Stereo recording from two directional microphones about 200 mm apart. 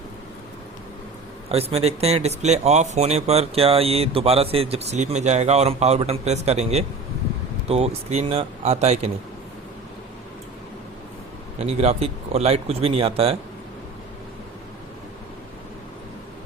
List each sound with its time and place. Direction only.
1.5 s speech: 30° right (ahead or behind)
11.6 s speech: 30° right (ahead or behind)